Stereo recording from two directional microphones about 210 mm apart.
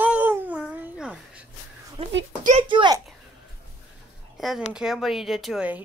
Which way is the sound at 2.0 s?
25° right (ahead or behind).